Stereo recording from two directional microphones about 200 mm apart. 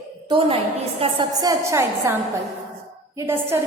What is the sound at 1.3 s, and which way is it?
Speech, 20° right (ahead or behind).